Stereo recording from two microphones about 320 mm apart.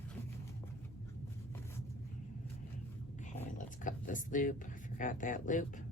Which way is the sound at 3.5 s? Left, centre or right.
Left.